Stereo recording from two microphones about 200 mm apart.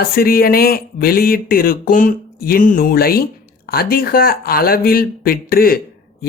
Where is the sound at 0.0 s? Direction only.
45° left (ahead or behind).